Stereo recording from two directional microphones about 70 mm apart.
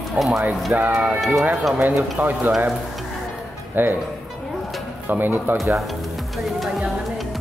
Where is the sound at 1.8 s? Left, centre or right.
Right.